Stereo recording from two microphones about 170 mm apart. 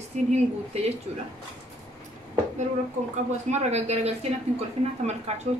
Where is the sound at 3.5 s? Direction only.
40° right (ahead or behind).